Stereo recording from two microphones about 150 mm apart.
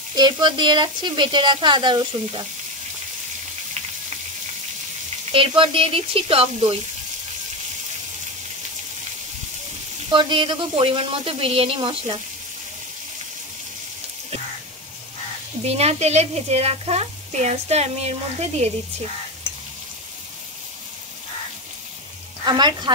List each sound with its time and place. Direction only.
0.1 s a woman's voice: 30° right (ahead or behind)
5.3 s a woman's voice: 35° right (ahead or behind)
10.1 s a woman's voice: 30° right (ahead or behind)
15.6 s speech: 45° right (ahead or behind)
22.4 s speech: 30° right (ahead or behind)